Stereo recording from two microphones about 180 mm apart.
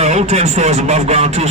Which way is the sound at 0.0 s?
40° right (ahead or behind).